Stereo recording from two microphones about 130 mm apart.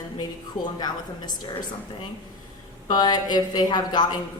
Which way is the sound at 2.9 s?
30° left (ahead or behind).